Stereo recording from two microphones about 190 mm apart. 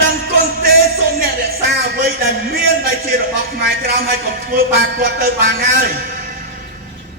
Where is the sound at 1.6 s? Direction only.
55° right (ahead or behind).